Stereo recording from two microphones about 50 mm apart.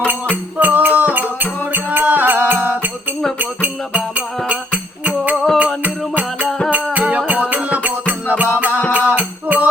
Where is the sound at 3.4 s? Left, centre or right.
Right.